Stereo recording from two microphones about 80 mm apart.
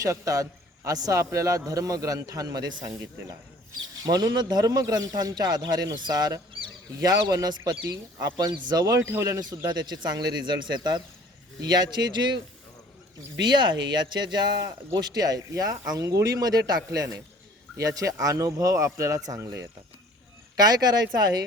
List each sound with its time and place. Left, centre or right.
0.0 s a man's voice: right
8.5 s speech: right
8.8 s speech: right
9.0 s speech: right
9.4 s a man's voice: right
13.4 s speech: right
15.0 s speech: right
20.6 s a man's voice: right